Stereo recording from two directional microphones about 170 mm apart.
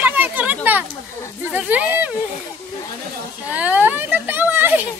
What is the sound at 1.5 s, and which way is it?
Speech, 10° right (ahead or behind).